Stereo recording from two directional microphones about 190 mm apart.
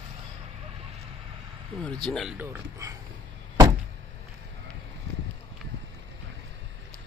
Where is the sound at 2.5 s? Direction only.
15° right (ahead or behind).